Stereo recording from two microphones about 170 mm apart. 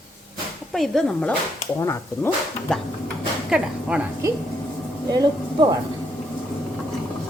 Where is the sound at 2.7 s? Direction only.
5° left (ahead or behind).